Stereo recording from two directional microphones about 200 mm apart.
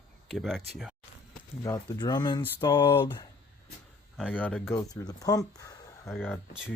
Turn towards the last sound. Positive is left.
turn(degrees=10)  # may be behind; listen again after turning